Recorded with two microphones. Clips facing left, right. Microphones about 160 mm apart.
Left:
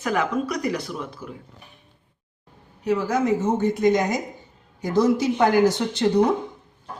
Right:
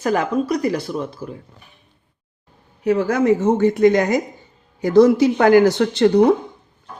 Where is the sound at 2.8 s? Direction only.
60° right (ahead or behind).